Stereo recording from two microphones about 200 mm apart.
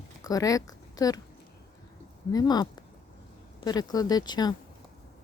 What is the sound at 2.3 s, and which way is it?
Speech, 20° left (ahead or behind).